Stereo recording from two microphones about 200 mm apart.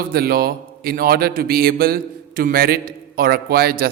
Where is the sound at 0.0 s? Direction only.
50° right (ahead or behind).